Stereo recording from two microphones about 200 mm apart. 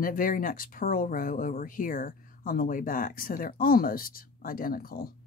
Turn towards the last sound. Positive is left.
turn(degrees=45)  # may be behind; listen again after turning